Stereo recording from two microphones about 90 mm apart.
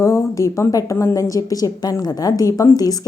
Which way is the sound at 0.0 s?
35° left (ahead or behind).